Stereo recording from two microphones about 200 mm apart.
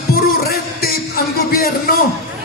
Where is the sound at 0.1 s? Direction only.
50° left (ahead or behind).